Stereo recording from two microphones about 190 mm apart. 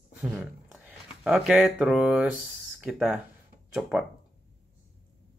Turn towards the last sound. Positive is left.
turn(degrees=-5)  # may be behind; listen again after turning